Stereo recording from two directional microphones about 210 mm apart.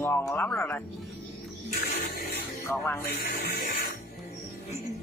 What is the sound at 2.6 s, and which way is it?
Speech, 15° left (ahead or behind).